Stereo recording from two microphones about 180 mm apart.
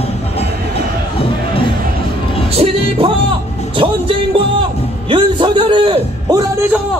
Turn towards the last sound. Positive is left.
turn(degrees=-10)  # may be behind; listen again after turning